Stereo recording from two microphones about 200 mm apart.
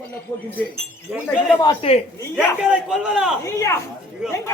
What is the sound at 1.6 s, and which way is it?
Speech, 25° left (ahead or behind).